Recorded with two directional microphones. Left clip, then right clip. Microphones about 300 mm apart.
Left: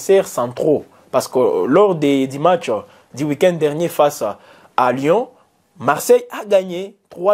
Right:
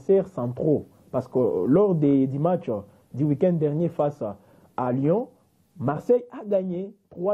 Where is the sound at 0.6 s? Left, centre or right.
Left.